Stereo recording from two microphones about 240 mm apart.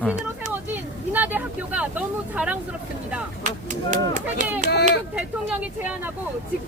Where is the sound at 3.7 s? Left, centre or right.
Right.